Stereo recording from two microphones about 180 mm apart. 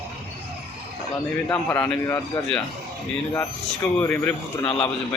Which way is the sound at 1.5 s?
10° left (ahead or behind).